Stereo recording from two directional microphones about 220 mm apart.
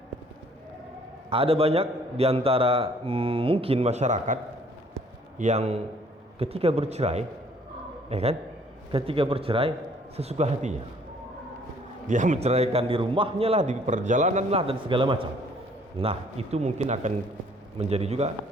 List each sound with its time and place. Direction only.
1.3 s a man's voice: 25° right (ahead or behind)
5.4 s a man's voice: 30° right (ahead or behind)
12.0 s a man's voice: 35° right (ahead or behind)